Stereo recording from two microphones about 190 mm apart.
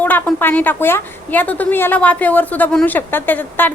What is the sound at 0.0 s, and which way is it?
A woman's voice, 10° left (ahead or behind).